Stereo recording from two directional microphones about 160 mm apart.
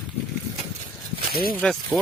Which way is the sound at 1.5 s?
5° left (ahead or behind).